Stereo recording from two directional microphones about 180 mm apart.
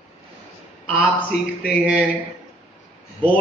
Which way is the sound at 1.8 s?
5° right (ahead or behind).